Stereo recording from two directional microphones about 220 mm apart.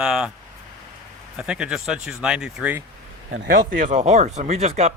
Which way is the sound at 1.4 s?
5° right (ahead or behind).